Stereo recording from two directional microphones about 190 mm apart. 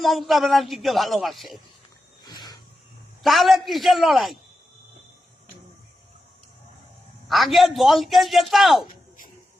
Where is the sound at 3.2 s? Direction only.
Centre (ahead or behind).